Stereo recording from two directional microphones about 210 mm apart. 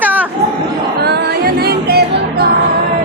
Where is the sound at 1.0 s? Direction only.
50° right (ahead or behind).